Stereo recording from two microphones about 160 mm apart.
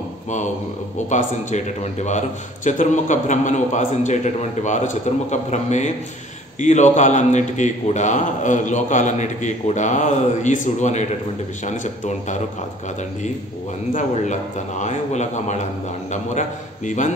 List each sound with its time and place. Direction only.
0.9 s a man's voice: 50° left (ahead or behind)
14.8 s a man's voice: 45° left (ahead or behind)